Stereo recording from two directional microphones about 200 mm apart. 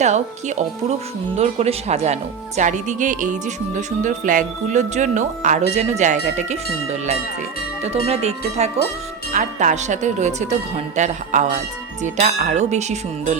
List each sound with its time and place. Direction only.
0.0 s speech: 35° right (ahead or behind)